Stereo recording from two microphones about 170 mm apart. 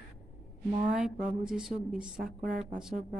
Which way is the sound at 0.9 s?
5° right (ahead or behind).